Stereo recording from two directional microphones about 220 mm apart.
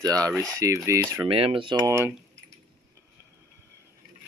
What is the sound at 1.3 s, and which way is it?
Speech, 25° right (ahead or behind).